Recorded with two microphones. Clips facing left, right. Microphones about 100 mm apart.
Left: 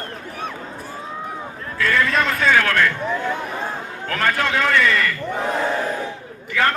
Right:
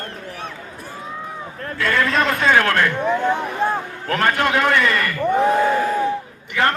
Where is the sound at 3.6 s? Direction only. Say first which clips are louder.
Right 8 dB; 55° right (ahead or behind).